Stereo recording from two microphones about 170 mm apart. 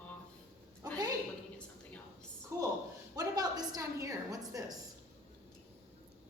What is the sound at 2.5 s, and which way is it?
A woman's voice, 20° right (ahead or behind).